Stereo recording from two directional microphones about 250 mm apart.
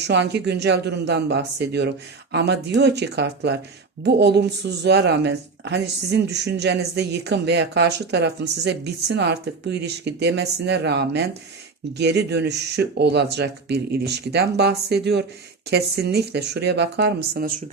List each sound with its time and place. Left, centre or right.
0.0 s speech: right